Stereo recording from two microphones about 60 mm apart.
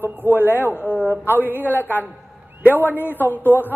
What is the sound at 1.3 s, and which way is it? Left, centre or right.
Speech, right.